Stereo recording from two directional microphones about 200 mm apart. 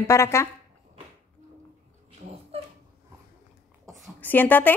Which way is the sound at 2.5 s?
30° right (ahead or behind).